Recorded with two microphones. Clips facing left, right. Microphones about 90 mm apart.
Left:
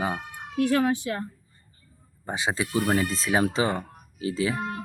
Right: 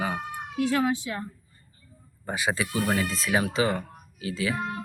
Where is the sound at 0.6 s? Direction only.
55° left (ahead or behind).